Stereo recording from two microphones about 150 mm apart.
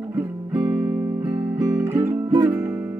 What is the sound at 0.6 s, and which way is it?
Music, 25° right (ahead or behind).